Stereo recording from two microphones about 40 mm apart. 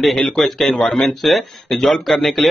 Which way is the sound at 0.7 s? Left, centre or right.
Centre.